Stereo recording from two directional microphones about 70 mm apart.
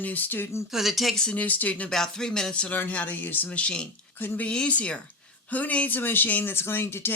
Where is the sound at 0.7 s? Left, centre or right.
Centre.